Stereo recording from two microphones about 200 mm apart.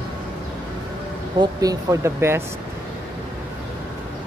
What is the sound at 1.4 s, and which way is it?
Speech, 20° right (ahead or behind).